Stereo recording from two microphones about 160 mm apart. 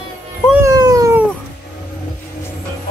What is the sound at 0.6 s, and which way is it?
Cat, 25° right (ahead or behind).